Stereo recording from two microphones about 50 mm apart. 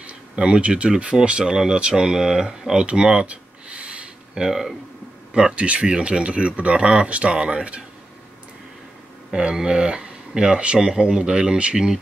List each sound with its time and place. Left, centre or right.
0.4 s speech: right
1.4 s speech: centre
4.5 s speech: centre
5.6 s speech: right
9.3 s speech: centre